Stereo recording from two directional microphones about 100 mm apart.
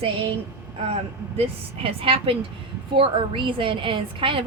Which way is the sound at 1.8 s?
65° right (ahead or behind).